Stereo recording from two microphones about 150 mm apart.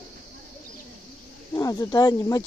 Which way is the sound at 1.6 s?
20° left (ahead or behind).